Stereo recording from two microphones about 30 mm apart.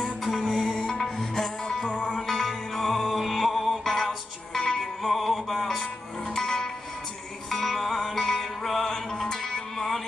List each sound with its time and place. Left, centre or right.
0.0 s music: centre
0.8 s music: centre
1.9 s music: left
2.2 s music: centre
3.1 s music: centre
4.6 s music: left
5.0 s music: centre
6.3 s music: left
7.5 s music: centre